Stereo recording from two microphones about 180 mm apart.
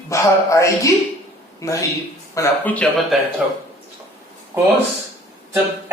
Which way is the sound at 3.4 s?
5° right (ahead or behind).